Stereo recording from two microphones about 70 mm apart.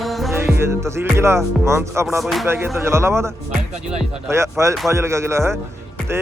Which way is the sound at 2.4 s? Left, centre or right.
Right.